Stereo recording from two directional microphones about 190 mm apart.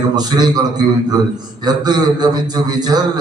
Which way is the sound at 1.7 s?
20° right (ahead or behind).